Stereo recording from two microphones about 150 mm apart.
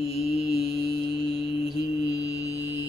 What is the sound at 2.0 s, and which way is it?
Mantra, 20° left (ahead or behind).